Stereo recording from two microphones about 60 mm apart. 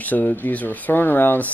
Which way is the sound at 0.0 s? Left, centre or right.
Left.